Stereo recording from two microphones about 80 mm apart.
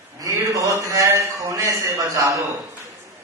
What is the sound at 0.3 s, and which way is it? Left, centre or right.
A man's voice, right.